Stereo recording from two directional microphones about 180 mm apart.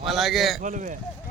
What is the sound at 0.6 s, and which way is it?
Speech, 45° right (ahead or behind).